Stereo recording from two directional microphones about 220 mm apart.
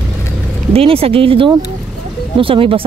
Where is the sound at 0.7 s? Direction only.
25° right (ahead or behind).